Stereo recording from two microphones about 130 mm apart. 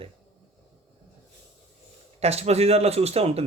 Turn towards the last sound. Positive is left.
turn(degrees=-50)  # may be behind; listen again after turning